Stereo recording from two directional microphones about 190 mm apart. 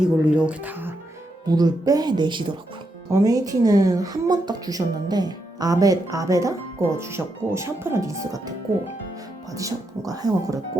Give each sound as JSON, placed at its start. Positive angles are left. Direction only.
{"t": 0.0, "sound": "speech", "side_deg": -5}
{"t": 1.5, "sound": "a woman's voice", "side_deg": -20}
{"t": 9.5, "sound": "speech", "side_deg": -15}